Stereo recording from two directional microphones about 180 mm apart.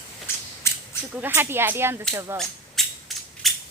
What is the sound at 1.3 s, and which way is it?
Speech, 10° right (ahead or behind).